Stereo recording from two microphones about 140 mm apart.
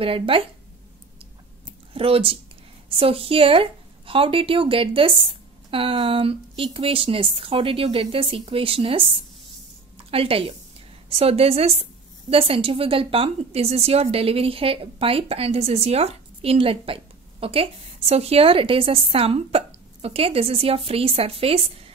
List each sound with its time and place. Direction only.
0.0 s a woman's voice: 40° right (ahead or behind)
2.0 s a woman's voice: 40° right (ahead or behind)